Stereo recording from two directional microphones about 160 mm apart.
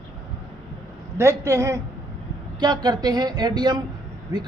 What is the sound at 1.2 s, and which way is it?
A man's voice, 20° right (ahead or behind).